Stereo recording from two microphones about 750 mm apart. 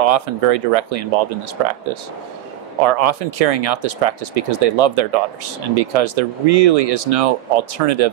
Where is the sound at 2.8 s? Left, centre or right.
Right.